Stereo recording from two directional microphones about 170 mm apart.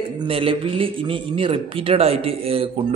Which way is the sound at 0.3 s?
30° right (ahead or behind).